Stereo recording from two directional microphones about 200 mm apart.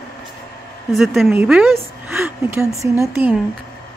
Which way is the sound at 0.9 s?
Centre (ahead or behind).